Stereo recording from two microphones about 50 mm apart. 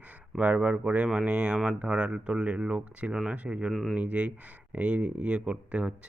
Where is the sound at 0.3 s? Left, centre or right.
Right.